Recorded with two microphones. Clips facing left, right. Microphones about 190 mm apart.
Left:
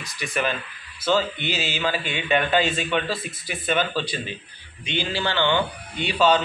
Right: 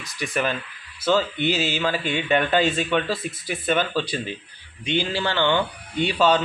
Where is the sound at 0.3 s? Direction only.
40° right (ahead or behind).